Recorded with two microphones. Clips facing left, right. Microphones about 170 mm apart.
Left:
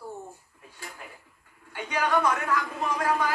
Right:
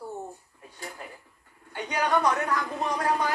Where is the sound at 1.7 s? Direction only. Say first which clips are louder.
Even; 35° right (ahead or behind).